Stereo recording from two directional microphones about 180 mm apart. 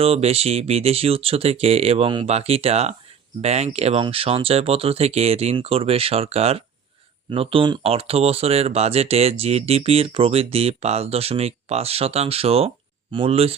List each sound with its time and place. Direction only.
0.0 s speech: 35° right (ahead or behind)